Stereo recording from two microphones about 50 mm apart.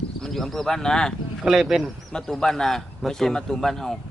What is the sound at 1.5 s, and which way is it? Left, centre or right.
Speech, centre.